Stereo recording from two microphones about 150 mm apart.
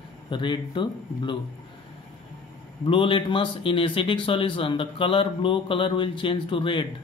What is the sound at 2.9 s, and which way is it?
Speech, 35° left (ahead or behind).